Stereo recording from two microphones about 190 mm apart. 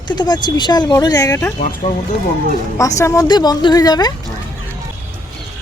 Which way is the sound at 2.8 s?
15° left (ahead or behind).